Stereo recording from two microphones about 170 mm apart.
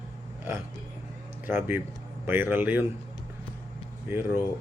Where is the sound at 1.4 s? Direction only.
10° right (ahead or behind).